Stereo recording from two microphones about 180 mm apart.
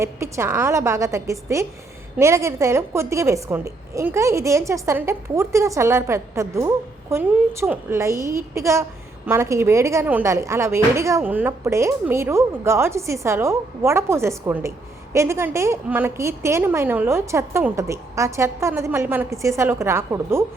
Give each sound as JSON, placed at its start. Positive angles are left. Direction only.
{"t": 0.0, "sound": "a woman's voice", "side_deg": -15}